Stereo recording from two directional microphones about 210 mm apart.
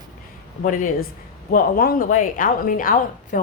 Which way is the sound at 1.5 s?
45° left (ahead or behind).